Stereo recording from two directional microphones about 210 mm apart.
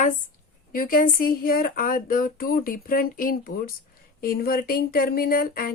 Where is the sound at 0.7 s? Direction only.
40° left (ahead or behind).